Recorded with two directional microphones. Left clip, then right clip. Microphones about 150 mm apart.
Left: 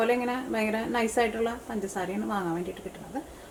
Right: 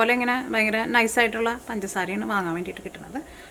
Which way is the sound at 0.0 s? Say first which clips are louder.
Right 5 dB; 40° right (ahead or behind).